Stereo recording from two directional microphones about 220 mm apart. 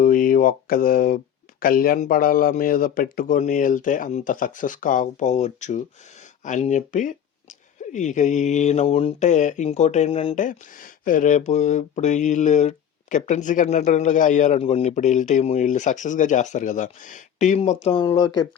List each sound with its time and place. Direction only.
0.0 s speech: 40° left (ahead or behind)
17.8 s speech: 20° left (ahead or behind)